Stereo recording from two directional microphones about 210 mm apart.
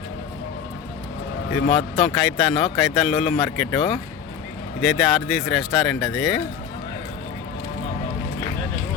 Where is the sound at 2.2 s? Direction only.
Centre (ahead or behind).